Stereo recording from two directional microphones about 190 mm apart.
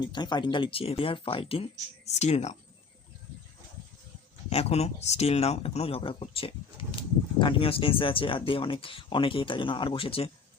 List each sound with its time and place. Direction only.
0.0 s speech: 25° left (ahead or behind)
4.4 s speech: 35° left (ahead or behind)